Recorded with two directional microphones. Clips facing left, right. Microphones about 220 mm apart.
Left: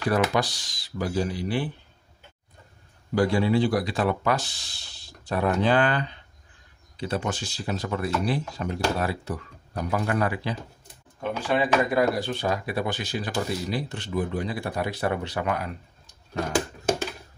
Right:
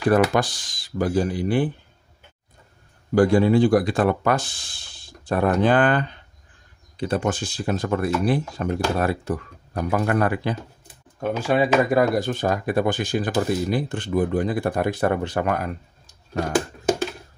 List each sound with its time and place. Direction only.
0.1 s speech: 50° right (ahead or behind)
3.2 s speech: 50° right (ahead or behind)